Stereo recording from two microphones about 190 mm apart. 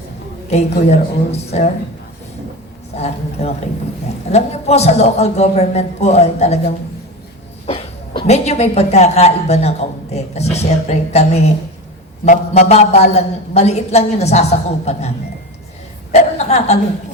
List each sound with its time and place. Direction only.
0.9 s a woman's voice: 35° left (ahead or behind)
2.9 s a woman's voice: 35° left (ahead or behind)
16.1 s speech: 35° left (ahead or behind)